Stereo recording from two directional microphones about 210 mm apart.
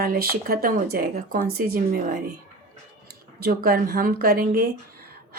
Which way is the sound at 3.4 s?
45° right (ahead or behind).